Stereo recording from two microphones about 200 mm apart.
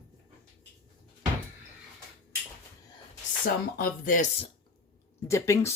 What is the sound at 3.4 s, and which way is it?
Speech, 45° left (ahead or behind).